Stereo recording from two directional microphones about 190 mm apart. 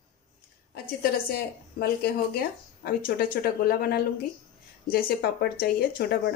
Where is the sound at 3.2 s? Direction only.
55° left (ahead or behind).